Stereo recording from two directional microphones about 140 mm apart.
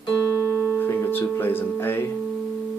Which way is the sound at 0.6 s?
10° left (ahead or behind).